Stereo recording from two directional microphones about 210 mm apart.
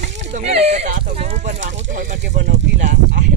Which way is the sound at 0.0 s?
35° right (ahead or behind).